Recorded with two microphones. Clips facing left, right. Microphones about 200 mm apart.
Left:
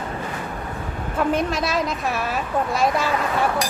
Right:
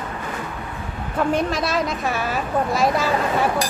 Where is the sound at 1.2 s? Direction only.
Centre (ahead or behind).